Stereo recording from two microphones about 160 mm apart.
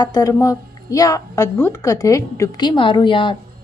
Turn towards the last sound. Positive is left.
turn(degrees=30)  # may be behind; listen again after turning